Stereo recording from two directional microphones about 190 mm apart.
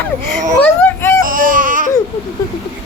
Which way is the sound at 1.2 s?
45° right (ahead or behind).